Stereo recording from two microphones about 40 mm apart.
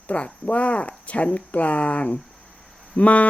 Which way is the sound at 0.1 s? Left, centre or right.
Left.